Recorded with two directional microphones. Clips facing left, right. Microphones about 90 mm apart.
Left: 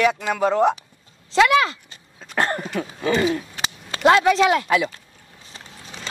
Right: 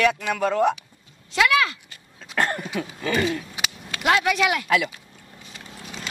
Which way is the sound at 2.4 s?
30° left (ahead or behind).